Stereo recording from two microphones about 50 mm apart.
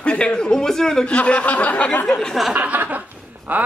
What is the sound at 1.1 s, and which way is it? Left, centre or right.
Snicker, left.